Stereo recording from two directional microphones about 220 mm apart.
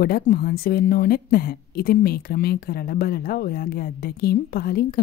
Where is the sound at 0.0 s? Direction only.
40° left (ahead or behind).